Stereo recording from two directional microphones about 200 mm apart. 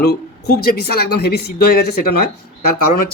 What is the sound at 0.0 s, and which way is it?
Speech, 55° left (ahead or behind).